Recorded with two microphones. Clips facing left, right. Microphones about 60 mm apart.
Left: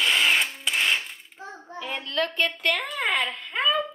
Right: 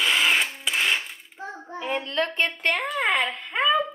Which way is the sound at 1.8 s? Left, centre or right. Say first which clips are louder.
Right 2 dB; right.